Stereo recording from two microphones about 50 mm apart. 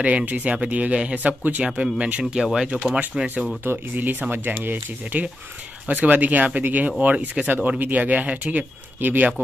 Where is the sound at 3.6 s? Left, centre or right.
Right.